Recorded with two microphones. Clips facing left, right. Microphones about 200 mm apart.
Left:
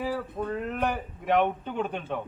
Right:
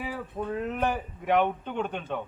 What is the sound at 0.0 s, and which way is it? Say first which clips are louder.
A man's voice: left 3 dB; 5° right (ahead or behind).